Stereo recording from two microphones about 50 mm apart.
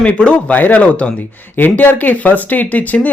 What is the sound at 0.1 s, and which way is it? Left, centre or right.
Speech, left.